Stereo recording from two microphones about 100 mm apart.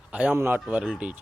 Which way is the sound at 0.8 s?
10° right (ahead or behind).